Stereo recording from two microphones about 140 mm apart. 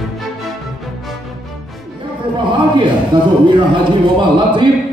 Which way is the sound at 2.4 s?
35° right (ahead or behind).